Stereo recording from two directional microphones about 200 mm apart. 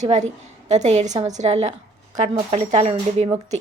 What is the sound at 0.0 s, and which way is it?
Speech, 35° right (ahead or behind).